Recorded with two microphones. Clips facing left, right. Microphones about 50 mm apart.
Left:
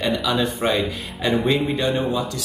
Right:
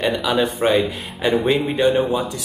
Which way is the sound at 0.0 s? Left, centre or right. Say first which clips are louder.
Right 2 dB; centre.